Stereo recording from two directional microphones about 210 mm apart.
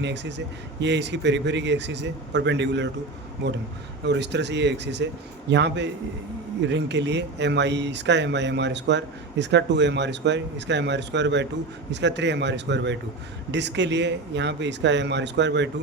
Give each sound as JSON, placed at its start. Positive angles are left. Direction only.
{"t": 0.0, "sound": "speech", "side_deg": -55}